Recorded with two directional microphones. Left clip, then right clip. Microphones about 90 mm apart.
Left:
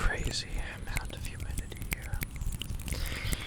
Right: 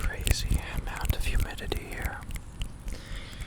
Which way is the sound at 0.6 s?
20° right (ahead or behind).